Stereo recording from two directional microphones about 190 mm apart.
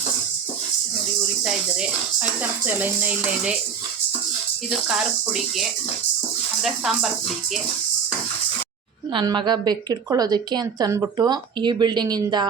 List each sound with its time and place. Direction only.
1.5 s speech: 5° right (ahead or behind)
4.9 s speech: 5° right (ahead or behind)
9.1 s a woman's voice: 25° right (ahead or behind)